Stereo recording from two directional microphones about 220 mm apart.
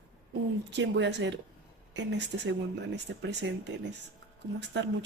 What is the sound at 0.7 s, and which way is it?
Speech, 55° right (ahead or behind).